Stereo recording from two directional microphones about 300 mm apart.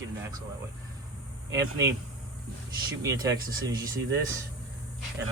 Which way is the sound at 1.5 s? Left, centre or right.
Centre.